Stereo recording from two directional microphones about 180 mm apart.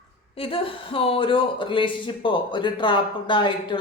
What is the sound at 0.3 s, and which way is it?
Speech, 30° left (ahead or behind).